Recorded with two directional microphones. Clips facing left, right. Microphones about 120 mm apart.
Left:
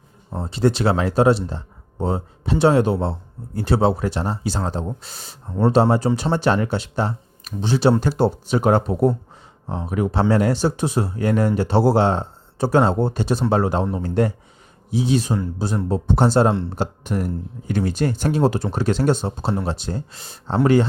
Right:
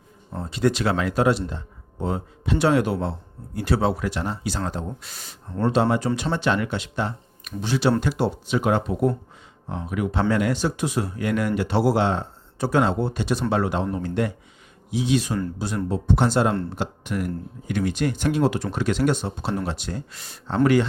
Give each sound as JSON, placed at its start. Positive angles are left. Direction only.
{"t": 0.3, "sound": "speech", "side_deg": 30}